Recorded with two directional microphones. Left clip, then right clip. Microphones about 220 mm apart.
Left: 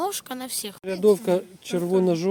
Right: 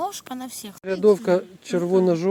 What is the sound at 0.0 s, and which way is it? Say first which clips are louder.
Speech: even; 60° left (ahead or behind).